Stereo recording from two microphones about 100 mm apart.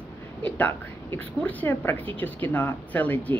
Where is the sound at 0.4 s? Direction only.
15° left (ahead or behind).